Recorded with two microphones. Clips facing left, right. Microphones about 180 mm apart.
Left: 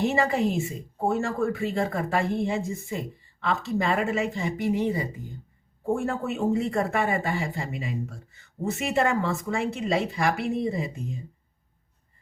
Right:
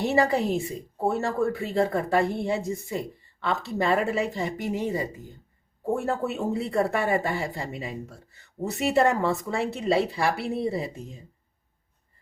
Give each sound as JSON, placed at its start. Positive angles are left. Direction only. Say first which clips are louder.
{"t": 0.0, "sound": "speech", "louder": "right 1 dB", "side_deg": -35}
{"t": 6.1, "sound": "speech", "louder": "left 1 dB", "side_deg": -40}